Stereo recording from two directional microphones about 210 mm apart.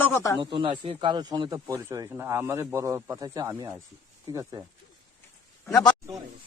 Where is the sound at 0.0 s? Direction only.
10° left (ahead or behind).